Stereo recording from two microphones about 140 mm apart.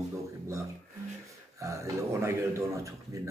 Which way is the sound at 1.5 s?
20° right (ahead or behind).